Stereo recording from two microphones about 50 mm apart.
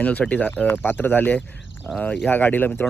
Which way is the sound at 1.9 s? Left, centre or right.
Left.